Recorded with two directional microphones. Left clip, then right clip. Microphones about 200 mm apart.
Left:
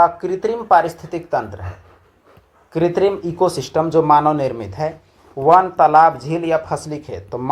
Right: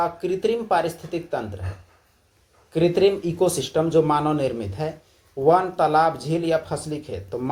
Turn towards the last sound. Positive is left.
turn(degrees=25)  # may be behind; listen again after turning